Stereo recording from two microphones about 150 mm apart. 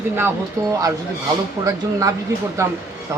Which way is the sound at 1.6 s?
20° right (ahead or behind).